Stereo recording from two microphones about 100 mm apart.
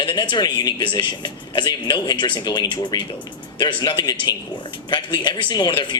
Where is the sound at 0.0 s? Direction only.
55° left (ahead or behind).